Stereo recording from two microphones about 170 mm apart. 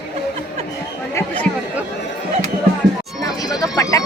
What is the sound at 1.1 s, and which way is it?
Chatter, 10° left (ahead or behind).